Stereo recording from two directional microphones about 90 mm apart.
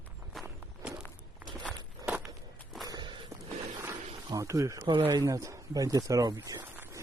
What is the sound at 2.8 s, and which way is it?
Walk, 50° right (ahead or behind).